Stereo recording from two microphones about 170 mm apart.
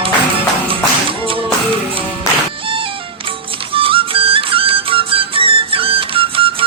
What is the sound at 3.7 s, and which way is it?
Music, 30° right (ahead or behind).